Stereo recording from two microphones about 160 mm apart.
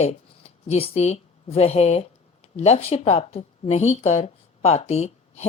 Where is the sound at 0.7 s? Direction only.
40° left (ahead or behind).